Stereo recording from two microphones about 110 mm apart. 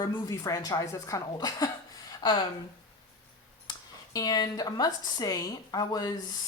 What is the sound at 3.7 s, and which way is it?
Speech, 35° left (ahead or behind).